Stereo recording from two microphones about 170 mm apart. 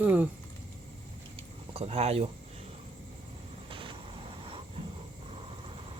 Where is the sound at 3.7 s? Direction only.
30° right (ahead or behind).